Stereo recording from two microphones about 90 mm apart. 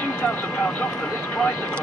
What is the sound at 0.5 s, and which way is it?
Speech, 10° left (ahead or behind).